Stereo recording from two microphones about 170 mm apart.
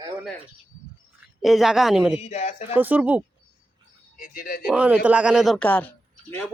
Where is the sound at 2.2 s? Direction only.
40° left (ahead or behind).